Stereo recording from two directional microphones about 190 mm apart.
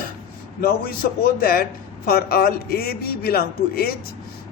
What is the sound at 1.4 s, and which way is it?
A woman's voice, 50° left (ahead or behind).